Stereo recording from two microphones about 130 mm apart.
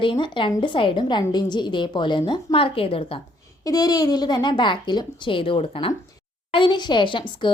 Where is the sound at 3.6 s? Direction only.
30° left (ahead or behind).